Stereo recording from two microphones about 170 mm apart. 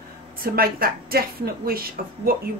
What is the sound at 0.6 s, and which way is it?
A woman's voice, 60° right (ahead or behind).